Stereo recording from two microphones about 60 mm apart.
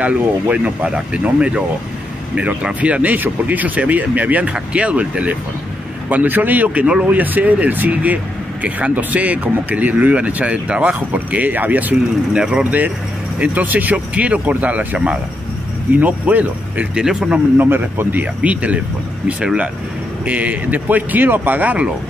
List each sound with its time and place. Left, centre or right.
0.0 s speech: right
12.3 s speech: centre
13.4 s speech: right
17.0 s speech: centre
17.6 s speech: right